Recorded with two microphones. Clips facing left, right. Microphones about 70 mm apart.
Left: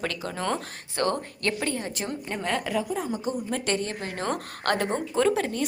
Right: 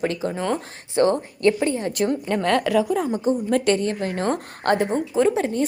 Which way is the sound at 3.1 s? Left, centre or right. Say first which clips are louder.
Right 8 dB; right.